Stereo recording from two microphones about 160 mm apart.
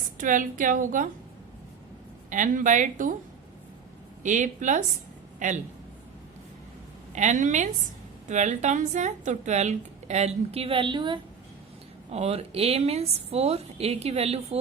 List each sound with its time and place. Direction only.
0.2 s a woman's voice: 55° right (ahead or behind)
2.3 s a woman's voice: 55° right (ahead or behind)
4.2 s a woman's voice: 50° right (ahead or behind)
7.1 s a woman's voice: 50° right (ahead or behind); by 11.2 s 30° right (ahead or behind)
12.1 s a woman's voice: 40° right (ahead or behind)